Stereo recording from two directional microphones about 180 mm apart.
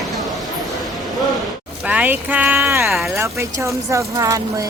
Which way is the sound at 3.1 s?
15° right (ahead or behind).